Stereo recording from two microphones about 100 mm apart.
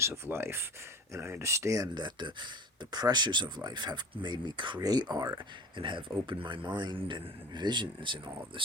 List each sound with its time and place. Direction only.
0.0 s speech: 25° right (ahead or behind)
2.0 s speech: 50° right (ahead or behind)
5.7 s speech: 55° right (ahead or behind)